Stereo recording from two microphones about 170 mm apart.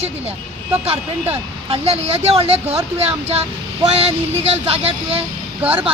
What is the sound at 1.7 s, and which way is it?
Speech, 35° right (ahead or behind).